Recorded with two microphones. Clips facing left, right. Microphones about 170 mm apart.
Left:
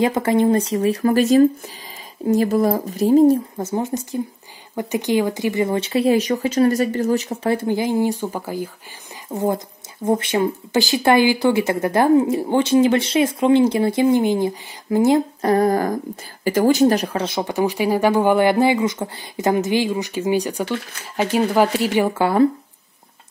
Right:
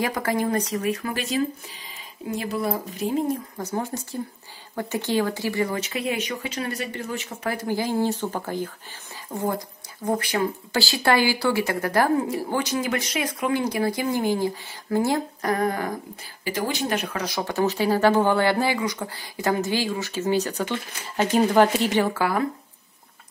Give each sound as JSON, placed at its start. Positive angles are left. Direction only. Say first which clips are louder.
{"t": 0.0, "sound": "speech", "louder": "left 8 dB", "side_deg": 25}
{"t": 1.0, "sound": "speech", "louder": "left 12 dB", "side_deg": 45}
{"t": 3.5, "sound": "speech", "louder": "left 6 dB", "side_deg": 20}
{"t": 9.3, "sound": "speech", "louder": "left 5 dB", "side_deg": 20}
{"t": 15.5, "sound": "a woman's voice", "louder": "left 8 dB", "side_deg": 35}
{"t": 22.1, "sound": "speech", "louder": "left 8 dB", "side_deg": 25}